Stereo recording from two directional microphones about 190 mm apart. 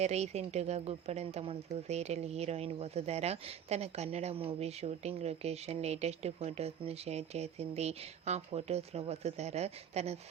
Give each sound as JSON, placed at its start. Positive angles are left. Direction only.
{"t": 0.0, "sound": "speech", "side_deg": -35}